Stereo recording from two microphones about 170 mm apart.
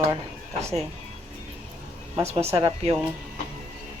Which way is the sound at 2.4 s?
15° right (ahead or behind).